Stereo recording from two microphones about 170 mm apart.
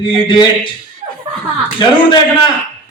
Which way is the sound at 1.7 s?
25° left (ahead or behind).